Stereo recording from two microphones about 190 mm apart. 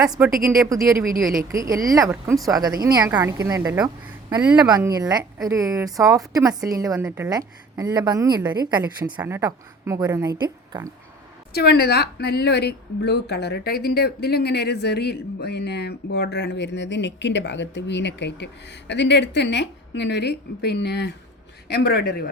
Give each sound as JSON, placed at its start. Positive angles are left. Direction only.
{"t": 0.3, "sound": "a woman's voice", "side_deg": -50}
{"t": 1.5, "sound": "a woman's voice", "side_deg": -15}
{"t": 4.7, "sound": "a woman's voice", "side_deg": -20}
{"t": 11.5, "sound": "a woman's voice", "side_deg": 55}